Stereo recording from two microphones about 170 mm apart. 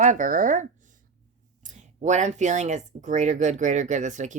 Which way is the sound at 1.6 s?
45° right (ahead or behind).